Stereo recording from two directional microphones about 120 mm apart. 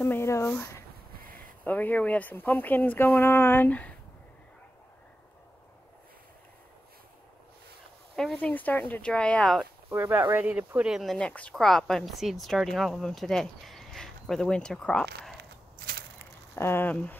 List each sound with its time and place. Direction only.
0.0 s a sound: 20° left (ahead or behind)
1.6 s speech: 15° left (ahead or behind)
8.2 s speech: 5° left (ahead or behind)
9.8 s speech: 15° right (ahead or behind)
10.9 s speech: centre (ahead or behind)
16.5 s speech: 20° left (ahead or behind)